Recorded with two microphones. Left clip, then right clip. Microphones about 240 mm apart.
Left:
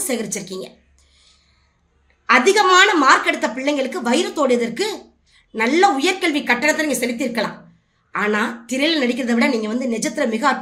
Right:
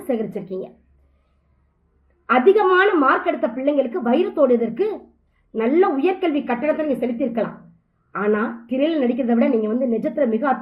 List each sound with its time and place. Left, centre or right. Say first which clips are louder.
0.1 s a woman's voice: right 2 dB; centre
2.2 s a woman's voice: left 1 dB; centre